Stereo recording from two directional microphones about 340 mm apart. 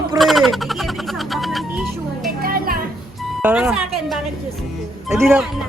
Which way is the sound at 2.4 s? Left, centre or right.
Right.